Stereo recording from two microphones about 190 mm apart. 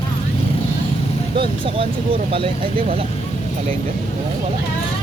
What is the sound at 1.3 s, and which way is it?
Speech, 30° right (ahead or behind).